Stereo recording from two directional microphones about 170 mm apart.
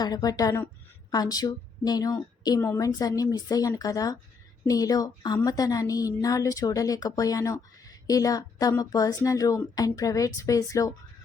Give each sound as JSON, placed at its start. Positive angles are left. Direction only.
{"t": 0.0, "sound": "a woman's voice", "side_deg": 20}